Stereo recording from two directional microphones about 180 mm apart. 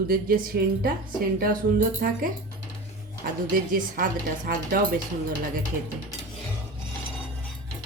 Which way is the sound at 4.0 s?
50° right (ahead or behind).